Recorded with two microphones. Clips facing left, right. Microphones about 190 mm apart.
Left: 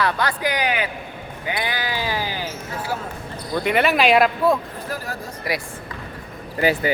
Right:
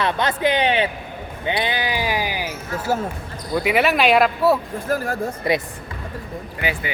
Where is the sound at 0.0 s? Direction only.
20° right (ahead or behind).